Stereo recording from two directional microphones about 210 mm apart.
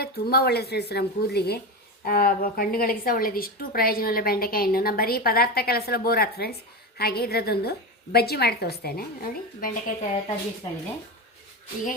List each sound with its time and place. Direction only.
0.0 s a woman's voice: 50° left (ahead or behind)